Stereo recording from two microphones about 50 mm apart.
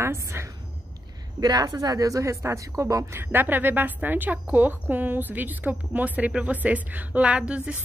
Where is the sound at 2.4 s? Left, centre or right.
Right.